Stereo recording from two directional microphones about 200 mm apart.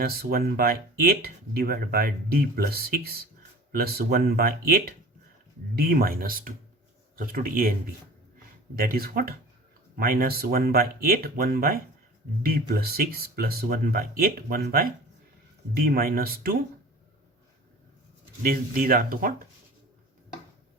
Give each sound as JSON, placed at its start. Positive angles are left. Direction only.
{"t": 0.0, "sound": "speech", "side_deg": -50}
{"t": 8.7, "sound": "speech", "side_deg": -45}
{"t": 18.4, "sound": "speech", "side_deg": -45}